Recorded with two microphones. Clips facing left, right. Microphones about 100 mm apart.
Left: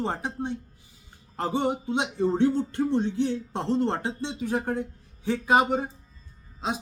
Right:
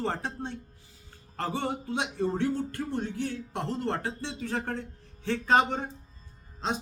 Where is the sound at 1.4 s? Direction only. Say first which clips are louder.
Left 5 dB; 20° left (ahead or behind).